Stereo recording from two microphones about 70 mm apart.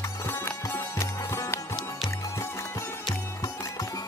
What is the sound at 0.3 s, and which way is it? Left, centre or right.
Music, left.